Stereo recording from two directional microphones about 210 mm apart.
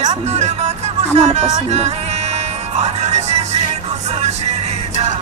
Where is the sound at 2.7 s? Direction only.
30° right (ahead or behind).